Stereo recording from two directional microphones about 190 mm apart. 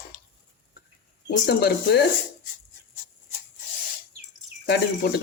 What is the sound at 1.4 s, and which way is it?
Speech, 60° left (ahead or behind).